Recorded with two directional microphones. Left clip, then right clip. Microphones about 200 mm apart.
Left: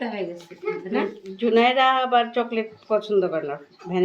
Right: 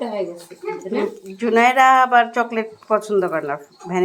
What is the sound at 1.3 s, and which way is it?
Speech, 15° right (ahead or behind).